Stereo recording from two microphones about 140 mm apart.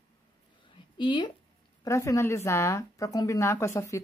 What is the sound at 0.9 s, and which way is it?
Speech, 35° left (ahead or behind).